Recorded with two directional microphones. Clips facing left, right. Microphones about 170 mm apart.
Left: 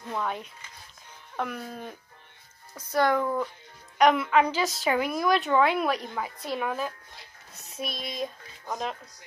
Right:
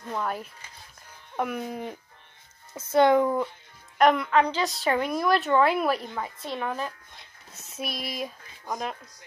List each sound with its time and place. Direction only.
0.1 s a woman's voice: 5° right (ahead or behind); by 3.3 s 20° right (ahead or behind)
4.0 s a woman's voice: centre (ahead or behind)